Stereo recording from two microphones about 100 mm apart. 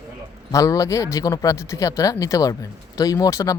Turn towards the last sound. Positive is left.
turn(degrees=35)  # may be behind; listen again after turning